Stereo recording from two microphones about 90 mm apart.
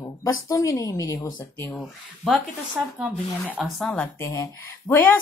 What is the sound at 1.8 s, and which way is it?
Speech, 5° right (ahead or behind).